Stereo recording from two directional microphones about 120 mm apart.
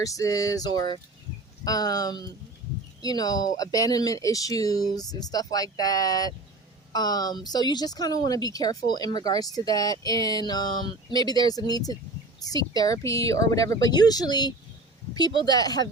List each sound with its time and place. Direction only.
0.0 s speech: 30° left (ahead or behind)